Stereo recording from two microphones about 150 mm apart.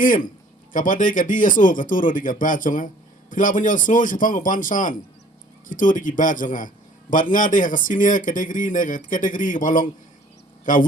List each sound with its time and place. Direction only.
0.0 s speech: 65° left (ahead or behind)